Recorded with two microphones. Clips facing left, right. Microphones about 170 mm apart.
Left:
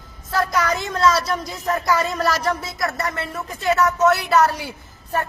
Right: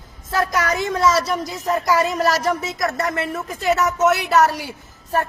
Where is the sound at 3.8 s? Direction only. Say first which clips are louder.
Left 1 dB; 20° right (ahead or behind).